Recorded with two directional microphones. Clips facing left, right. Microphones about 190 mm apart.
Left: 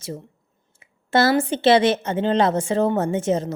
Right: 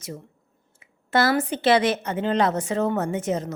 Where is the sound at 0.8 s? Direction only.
25° left (ahead or behind).